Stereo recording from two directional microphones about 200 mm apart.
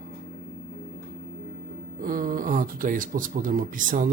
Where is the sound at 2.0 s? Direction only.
45° right (ahead or behind).